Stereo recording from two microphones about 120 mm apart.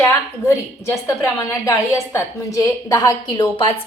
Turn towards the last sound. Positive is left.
turn(degrees=30)  # may be behind; listen again after turning